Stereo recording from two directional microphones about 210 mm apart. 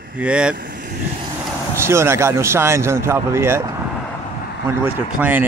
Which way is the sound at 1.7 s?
10° right (ahead or behind).